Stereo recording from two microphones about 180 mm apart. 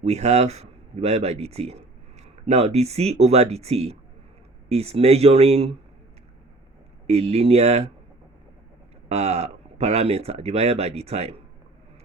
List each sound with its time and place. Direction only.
0.0 s speech: 40° right (ahead or behind)
7.1 s speech: 35° right (ahead or behind)
9.0 s speech: 35° right (ahead or behind)